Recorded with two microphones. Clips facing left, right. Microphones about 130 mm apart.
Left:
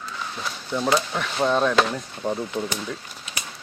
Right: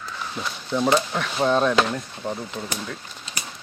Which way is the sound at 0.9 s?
Centre (ahead or behind).